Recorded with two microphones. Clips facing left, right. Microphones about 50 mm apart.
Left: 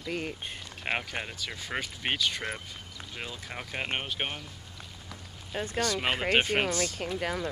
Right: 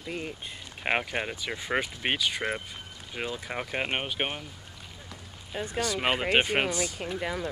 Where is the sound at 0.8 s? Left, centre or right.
Centre.